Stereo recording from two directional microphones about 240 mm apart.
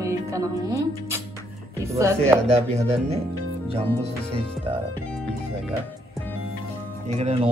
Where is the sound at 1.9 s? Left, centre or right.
Centre.